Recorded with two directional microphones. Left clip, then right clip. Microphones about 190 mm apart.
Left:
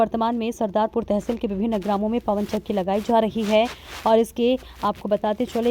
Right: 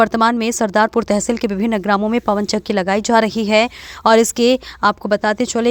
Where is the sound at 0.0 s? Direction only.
15° right (ahead or behind).